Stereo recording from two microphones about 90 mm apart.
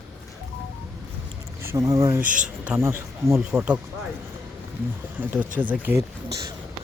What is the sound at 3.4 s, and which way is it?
Speech, 10° right (ahead or behind).